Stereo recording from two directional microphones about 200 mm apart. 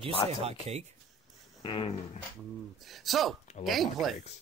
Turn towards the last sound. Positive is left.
turn(degrees=0)  # may be behind; listen again after turning